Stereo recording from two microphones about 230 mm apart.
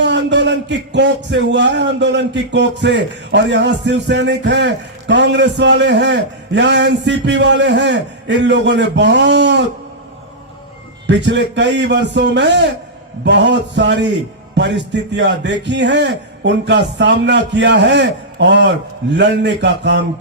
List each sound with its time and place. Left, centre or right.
0.0 s a man's voice: right
11.0 s a man's voice: right